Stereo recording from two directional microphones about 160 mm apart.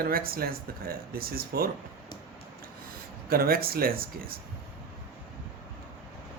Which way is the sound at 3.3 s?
70° right (ahead or behind).